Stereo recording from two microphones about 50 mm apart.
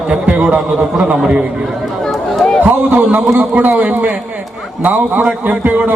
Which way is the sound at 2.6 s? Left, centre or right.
Right.